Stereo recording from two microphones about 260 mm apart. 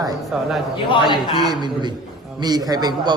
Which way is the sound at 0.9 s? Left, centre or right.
Centre.